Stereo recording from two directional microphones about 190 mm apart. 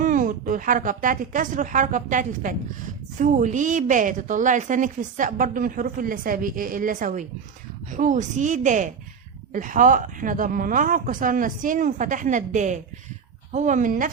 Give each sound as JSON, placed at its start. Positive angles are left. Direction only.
{"t": 0.0, "sound": "a woman's voice", "side_deg": -45}